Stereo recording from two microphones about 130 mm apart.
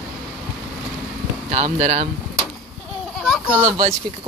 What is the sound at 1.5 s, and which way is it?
Speech, 65° right (ahead or behind).